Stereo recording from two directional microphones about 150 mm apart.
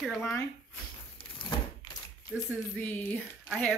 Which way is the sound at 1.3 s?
35° left (ahead or behind).